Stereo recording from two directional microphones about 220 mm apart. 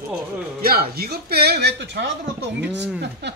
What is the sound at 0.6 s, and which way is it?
Speech, 45° right (ahead or behind).